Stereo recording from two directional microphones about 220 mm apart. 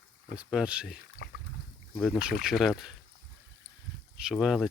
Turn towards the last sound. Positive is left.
turn(degrees=0)  # may be behind; listen again after turning